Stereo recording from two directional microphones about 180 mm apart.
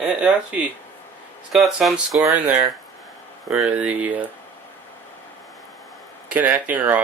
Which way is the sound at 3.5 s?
5° right (ahead or behind).